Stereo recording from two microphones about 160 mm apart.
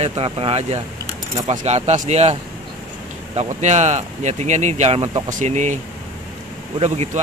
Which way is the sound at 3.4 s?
45° right (ahead or behind).